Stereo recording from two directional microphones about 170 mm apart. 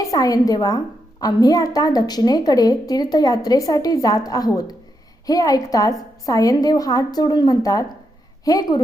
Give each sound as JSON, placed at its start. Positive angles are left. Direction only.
{"t": 0.0, "sound": "a woman's voice", "side_deg": 20}